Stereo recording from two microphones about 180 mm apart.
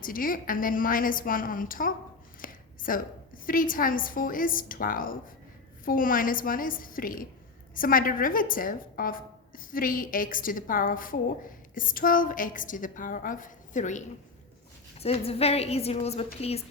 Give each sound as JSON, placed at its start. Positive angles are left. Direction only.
{"t": 0.0, "sound": "a woman's voice", "side_deg": 50}